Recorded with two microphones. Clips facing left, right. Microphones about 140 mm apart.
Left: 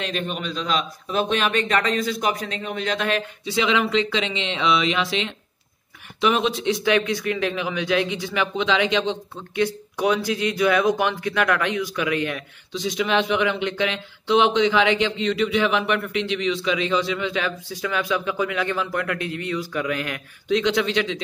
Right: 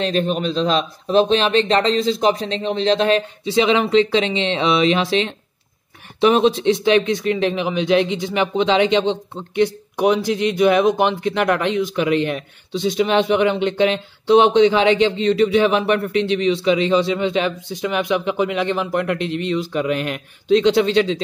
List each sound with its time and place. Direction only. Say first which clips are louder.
0.0 s speech: right 8 dB; 35° right (ahead or behind)